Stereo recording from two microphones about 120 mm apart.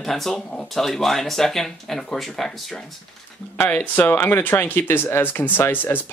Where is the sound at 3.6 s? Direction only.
15° left (ahead or behind).